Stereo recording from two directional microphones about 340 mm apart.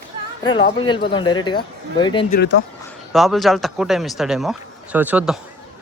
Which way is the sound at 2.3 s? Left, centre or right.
Left.